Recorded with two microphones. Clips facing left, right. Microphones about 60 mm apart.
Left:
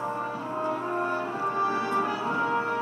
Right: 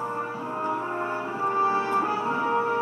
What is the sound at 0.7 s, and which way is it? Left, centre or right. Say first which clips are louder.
Music: even; centre.